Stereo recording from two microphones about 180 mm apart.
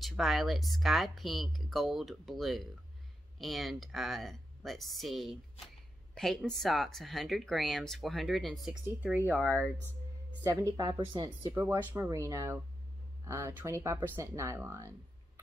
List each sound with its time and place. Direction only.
0.0 s speech: centre (ahead or behind)
8.8 s speech: 10° right (ahead or behind)